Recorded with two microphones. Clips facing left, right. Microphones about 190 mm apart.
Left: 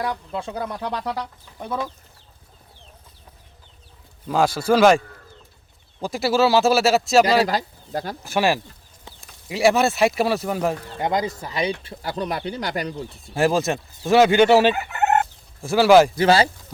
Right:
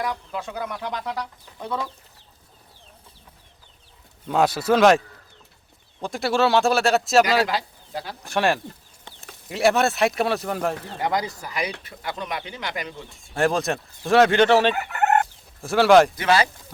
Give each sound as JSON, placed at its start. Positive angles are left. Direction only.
{"t": 0.0, "sound": "speech", "side_deg": 30}
{"t": 1.5, "sound": "speech", "side_deg": 20}
{"t": 4.3, "sound": "speech", "side_deg": 0}
{"t": 7.4, "sound": "speech", "side_deg": 45}
{"t": 8.2, "sound": "speech", "side_deg": 5}
{"t": 11.0, "sound": "speech", "side_deg": 25}
{"t": 13.3, "sound": "speech", "side_deg": 0}
{"t": 16.1, "sound": "speech", "side_deg": 30}